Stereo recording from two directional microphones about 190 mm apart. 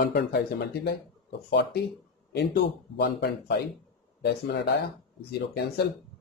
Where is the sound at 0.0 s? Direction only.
55° left (ahead or behind).